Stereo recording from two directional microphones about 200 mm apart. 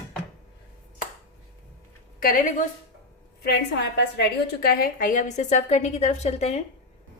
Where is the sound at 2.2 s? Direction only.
45° left (ahead or behind).